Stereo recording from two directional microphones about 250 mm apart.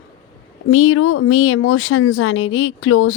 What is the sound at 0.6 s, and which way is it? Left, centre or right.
A woman's voice, left.